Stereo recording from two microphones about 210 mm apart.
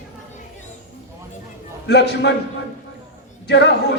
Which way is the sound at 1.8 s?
55° left (ahead or behind).